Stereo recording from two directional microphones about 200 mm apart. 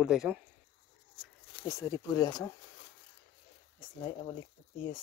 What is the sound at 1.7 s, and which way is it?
Speech, 15° left (ahead or behind).